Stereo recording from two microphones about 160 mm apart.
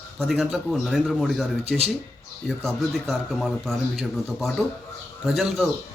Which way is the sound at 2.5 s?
Centre (ahead or behind).